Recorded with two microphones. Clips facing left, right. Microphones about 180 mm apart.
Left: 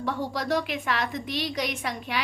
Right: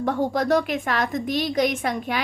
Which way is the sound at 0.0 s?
50° right (ahead or behind).